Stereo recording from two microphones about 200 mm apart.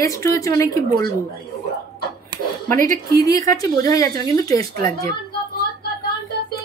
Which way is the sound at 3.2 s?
15° left (ahead or behind).